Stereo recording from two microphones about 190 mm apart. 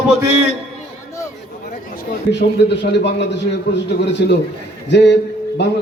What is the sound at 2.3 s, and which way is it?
A man's voice, 65° left (ahead or behind).